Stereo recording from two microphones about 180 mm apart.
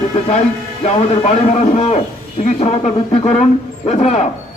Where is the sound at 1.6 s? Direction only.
40° left (ahead or behind).